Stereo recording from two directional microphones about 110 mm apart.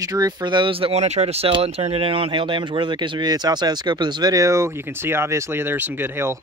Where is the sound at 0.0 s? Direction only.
35° right (ahead or behind).